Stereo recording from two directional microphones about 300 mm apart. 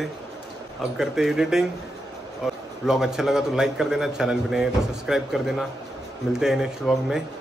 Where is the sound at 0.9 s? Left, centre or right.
Centre.